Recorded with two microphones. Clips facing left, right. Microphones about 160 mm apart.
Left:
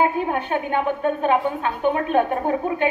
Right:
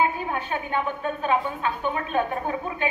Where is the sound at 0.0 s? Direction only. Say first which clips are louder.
Left 4 dB; 55° left (ahead or behind).